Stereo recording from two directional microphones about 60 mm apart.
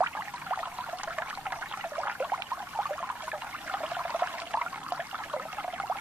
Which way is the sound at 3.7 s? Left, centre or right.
Right.